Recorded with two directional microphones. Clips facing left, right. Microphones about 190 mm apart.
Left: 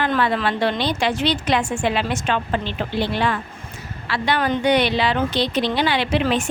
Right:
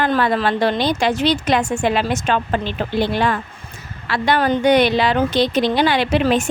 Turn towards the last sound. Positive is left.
turn(degrees=-45)  # may be behind; listen again after turning